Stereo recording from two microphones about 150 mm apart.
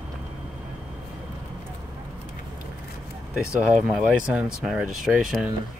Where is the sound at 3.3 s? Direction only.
5° right (ahead or behind).